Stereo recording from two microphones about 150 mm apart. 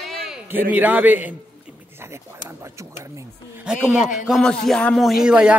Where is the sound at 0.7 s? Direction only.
10° right (ahead or behind).